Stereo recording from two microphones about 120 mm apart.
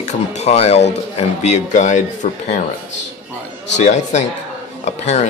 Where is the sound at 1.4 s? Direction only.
75° left (ahead or behind).